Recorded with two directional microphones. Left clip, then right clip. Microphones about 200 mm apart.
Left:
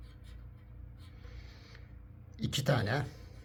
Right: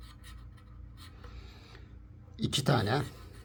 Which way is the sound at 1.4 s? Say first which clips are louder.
Right 2 dB; 25° right (ahead or behind).